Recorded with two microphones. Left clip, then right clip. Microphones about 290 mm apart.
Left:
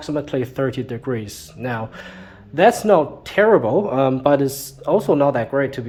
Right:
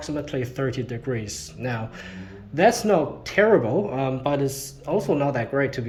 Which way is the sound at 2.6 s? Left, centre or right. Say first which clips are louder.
Left 5 dB; centre.